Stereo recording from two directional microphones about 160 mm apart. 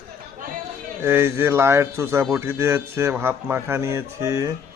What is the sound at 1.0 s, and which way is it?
A man's voice, 15° right (ahead or behind).